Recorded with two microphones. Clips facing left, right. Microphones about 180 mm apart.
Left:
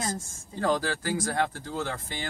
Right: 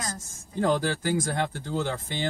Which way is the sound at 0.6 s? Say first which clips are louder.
Right 2 dB; 20° right (ahead or behind).